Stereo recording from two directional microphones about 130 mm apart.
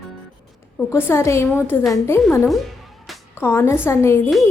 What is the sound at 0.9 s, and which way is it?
Speech, 20° left (ahead or behind).